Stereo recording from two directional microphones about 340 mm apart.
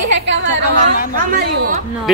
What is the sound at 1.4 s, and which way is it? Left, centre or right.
Speech, right.